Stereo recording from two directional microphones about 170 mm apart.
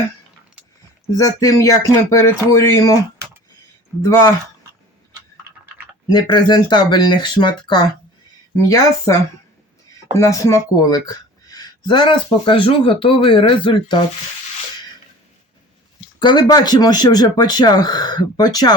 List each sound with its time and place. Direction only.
1.0 s speech: 20° left (ahead or behind)
4.0 s speech: 20° left (ahead or behind)
6.1 s speech: 25° left (ahead or behind)
10.2 s speech: 15° left (ahead or behind)
16.2 s speech: 25° left (ahead or behind)